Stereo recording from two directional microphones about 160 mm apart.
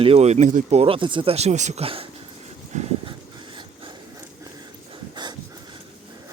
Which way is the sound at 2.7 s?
40° right (ahead or behind).